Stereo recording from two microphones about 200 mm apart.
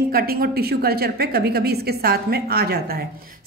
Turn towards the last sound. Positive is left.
turn(degrees=-50)  # may be behind; listen again after turning